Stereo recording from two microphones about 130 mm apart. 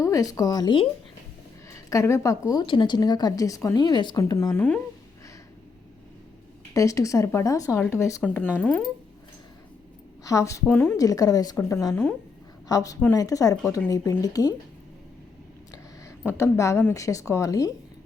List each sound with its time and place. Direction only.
0.0 s a woman's voice: 25° left (ahead or behind)
2.5 s speech: 35° left (ahead or behind)
6.7 s a woman's voice: 25° left (ahead or behind)
10.2 s a woman's voice: 25° left (ahead or behind)
15.7 s speech: 20° left (ahead or behind)